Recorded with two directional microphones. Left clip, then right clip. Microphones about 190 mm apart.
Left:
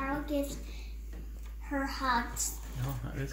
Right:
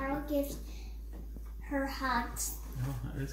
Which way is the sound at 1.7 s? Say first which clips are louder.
Left 2 dB; 10° right (ahead or behind).